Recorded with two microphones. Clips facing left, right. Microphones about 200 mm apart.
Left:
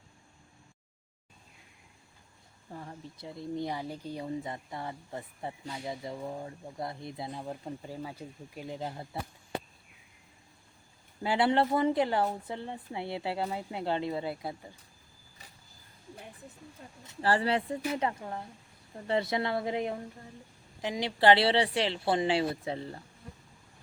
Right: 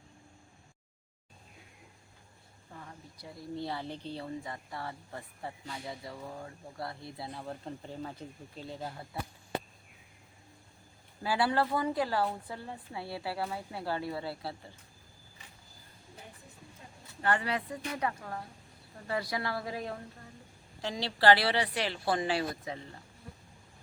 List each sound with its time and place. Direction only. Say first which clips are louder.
2.7 s speech: left 6 dB; 30° left (ahead or behind)
11.2 s speech: left 3 dB; 25° left (ahead or behind)
17.1 s speech: left 4 dB; 30° left (ahead or behind)